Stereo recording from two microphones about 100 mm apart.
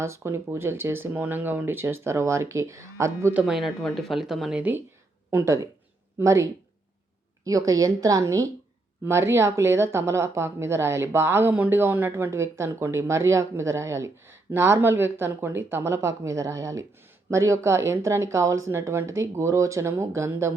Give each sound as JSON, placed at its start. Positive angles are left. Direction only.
{"t": 0.0, "sound": "a woman's voice", "side_deg": -25}
{"t": 3.3, "sound": "speech", "side_deg": -5}
{"t": 5.3, "sound": "a woman's voice", "side_deg": -25}